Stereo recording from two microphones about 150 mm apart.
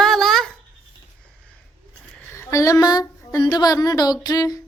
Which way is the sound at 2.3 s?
20° left (ahead or behind).